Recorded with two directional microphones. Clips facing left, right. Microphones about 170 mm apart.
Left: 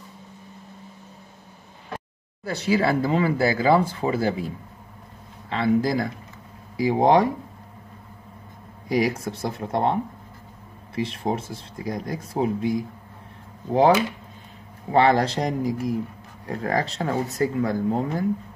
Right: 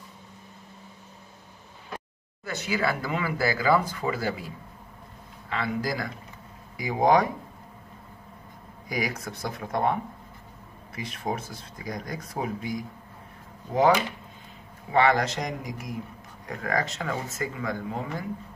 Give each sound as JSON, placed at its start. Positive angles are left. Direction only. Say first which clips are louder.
{"t": 2.4, "sound": "speech", "louder": "left 6 dB", "side_deg": 30}
{"t": 5.5, "sound": "speech", "louder": "left 8 dB", "side_deg": 25}
{"t": 8.8, "sound": "speech", "louder": "left 8 dB", "side_deg": 30}
{"t": 11.0, "sound": "speech", "louder": "left 6 dB", "side_deg": 25}
{"t": 14.9, "sound": "speech", "louder": "left 4 dB", "side_deg": 30}